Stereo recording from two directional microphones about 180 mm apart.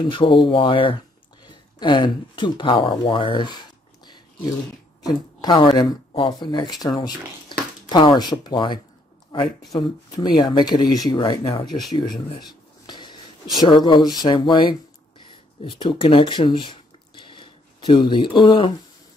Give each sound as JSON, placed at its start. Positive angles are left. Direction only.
{"t": 0.0, "sound": "speech", "side_deg": 25}
{"t": 5.0, "sound": "speech", "side_deg": 20}
{"t": 12.0, "sound": "a sound", "side_deg": 25}
{"t": 13.8, "sound": "speech", "side_deg": 25}